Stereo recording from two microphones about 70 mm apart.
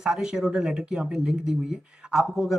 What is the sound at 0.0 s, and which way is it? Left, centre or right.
Speech, centre.